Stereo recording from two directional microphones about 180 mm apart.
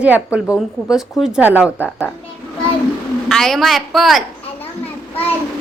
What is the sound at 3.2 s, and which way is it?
Speech, centre (ahead or behind).